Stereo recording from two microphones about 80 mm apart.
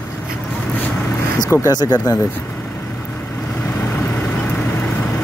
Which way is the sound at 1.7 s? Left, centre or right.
Left.